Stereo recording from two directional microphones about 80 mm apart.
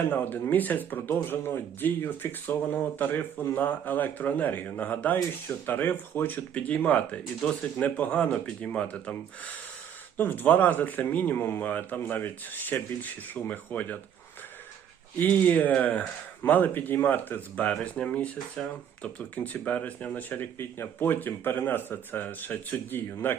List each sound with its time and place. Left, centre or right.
0.1 s speech: left
15.2 s speech: left